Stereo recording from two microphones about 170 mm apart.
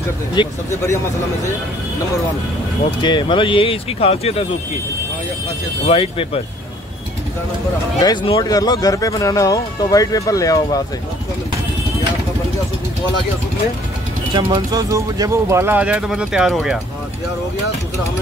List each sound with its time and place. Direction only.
0.3 s speech: 25° left (ahead or behind)
3.0 s speech: 25° left (ahead or behind)
5.9 s speech: 35° left (ahead or behind)
8.0 s speech: 25° left (ahead or behind)
14.3 s speech: 25° right (ahead or behind); by 16.5 s 5° right (ahead or behind)